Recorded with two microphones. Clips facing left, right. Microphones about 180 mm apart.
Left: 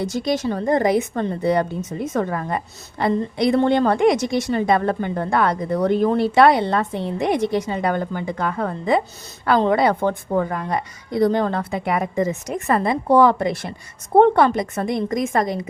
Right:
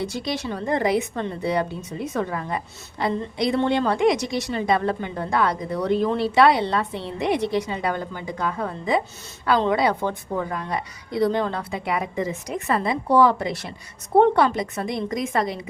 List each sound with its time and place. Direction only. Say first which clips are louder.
0.0 s a woman's voice: left 5 dB; 45° left (ahead or behind)